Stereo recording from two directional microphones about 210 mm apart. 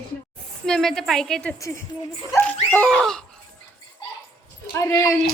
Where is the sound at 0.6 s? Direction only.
Centre (ahead or behind).